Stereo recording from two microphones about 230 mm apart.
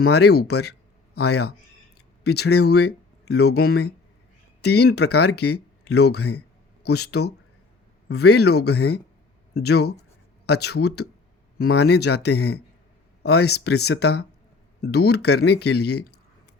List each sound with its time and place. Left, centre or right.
0.1 s speech: left
2.0 s a sound: left
2.6 s speech: left